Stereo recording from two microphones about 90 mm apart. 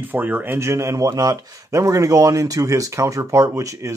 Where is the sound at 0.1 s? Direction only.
20° right (ahead or behind).